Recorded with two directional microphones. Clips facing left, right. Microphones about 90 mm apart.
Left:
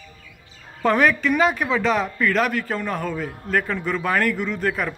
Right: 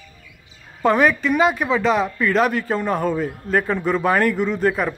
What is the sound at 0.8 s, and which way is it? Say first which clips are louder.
A man's voice: right 2 dB; 15° right (ahead or behind).